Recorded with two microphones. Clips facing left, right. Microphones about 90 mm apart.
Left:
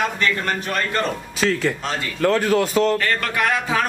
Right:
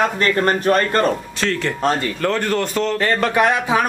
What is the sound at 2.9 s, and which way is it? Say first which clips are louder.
Speech: right 4 dB; 25° right (ahead or behind).